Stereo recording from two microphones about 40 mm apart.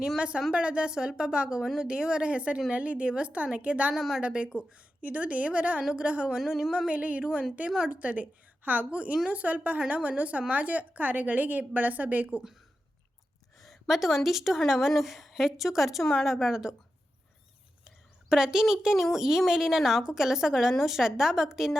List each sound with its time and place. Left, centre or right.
0.2 s a woman's voice: right
3.9 s a woman's voice: centre
4.2 s a woman's voice: right
6.4 s a woman's voice: centre
6.8 s a woman's voice: right
13.6 s a sound: centre
14.3 s a woman's voice: centre
17.8 s a woman's voice: centre